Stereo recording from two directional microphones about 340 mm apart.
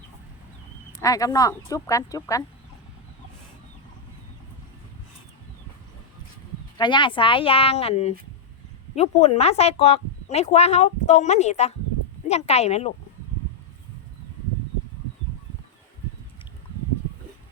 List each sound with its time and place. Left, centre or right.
1.0 s speech: centre
6.7 s speech: centre